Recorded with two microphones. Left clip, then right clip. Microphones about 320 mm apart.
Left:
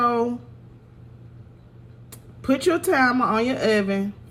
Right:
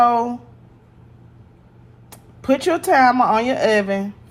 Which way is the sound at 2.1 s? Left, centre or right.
Centre.